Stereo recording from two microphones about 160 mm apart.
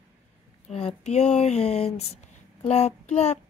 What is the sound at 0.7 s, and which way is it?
A child's voice, 40° left (ahead or behind).